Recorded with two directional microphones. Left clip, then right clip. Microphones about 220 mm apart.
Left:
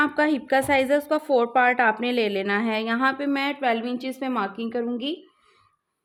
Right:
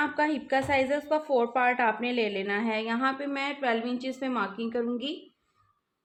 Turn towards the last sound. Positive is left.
turn(degrees=40)  # may be behind; listen again after turning